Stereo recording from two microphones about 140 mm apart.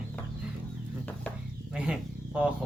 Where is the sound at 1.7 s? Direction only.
5° right (ahead or behind).